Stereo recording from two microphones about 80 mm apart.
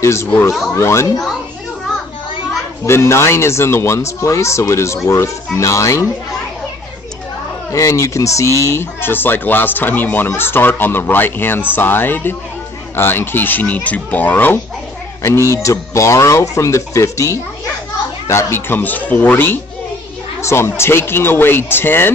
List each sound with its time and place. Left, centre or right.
0.0 s speech: left
2.9 s speech: left
7.7 s speech: left
15.2 s speech: left